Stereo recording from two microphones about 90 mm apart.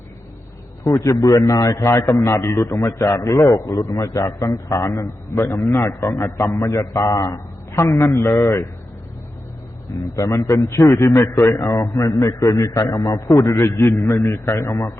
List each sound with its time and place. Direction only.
0.9 s a man's voice: 40° left (ahead or behind)
3.6 s a man's voice: 35° left (ahead or behind)
10.2 s a man's voice: 40° left (ahead or behind)